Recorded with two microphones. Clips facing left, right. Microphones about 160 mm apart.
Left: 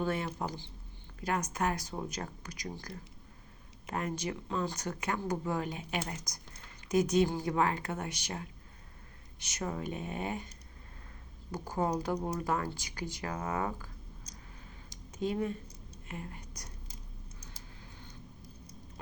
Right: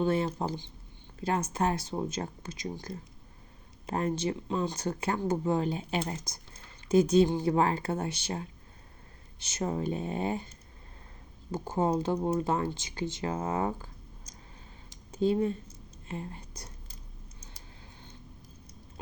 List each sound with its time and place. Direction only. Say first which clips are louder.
0.0 s speech: right 6 dB; 25° right (ahead or behind)
11.5 s speech: right 4 dB; 25° right (ahead or behind)
15.1 s speech: right 6 dB; 30° right (ahead or behind)